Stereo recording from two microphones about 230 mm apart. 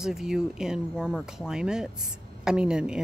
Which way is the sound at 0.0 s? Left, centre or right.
Centre.